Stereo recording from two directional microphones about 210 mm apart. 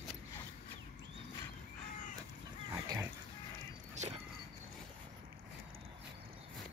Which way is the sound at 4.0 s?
35° right (ahead or behind).